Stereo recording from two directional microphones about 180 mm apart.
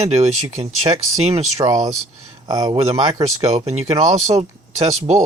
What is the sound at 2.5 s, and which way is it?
Speech, 25° right (ahead or behind).